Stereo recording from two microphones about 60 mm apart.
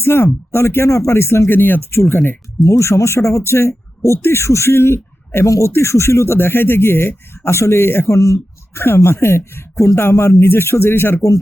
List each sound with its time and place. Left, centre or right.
0.0 s speech: left
0.9 s speech: left
2.6 s speech: left
5.5 s speech: left
8.1 s speech: left